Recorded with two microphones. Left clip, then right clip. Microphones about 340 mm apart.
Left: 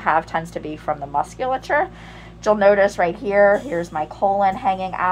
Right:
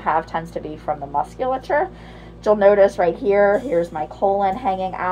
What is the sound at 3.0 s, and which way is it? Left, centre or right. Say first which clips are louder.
A woman's voice: even; left.